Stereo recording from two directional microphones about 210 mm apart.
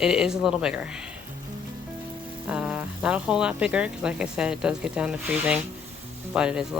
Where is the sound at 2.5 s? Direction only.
5° right (ahead or behind).